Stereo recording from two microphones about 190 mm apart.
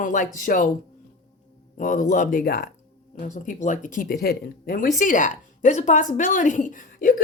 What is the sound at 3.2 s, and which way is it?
Speech, 45° left (ahead or behind).